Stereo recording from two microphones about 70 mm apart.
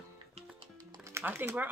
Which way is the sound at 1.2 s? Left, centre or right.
Right.